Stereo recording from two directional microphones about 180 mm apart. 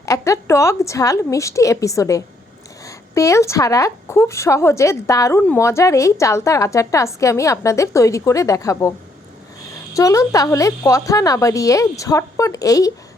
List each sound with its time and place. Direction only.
0.0 s speech: 15° left (ahead or behind)
9.9 s speech: 15° left (ahead or behind)